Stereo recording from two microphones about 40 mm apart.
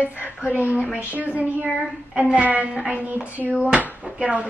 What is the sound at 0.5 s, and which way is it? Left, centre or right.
A woman's voice, right.